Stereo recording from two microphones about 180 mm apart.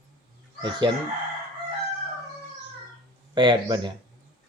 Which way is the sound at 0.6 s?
25° right (ahead or behind).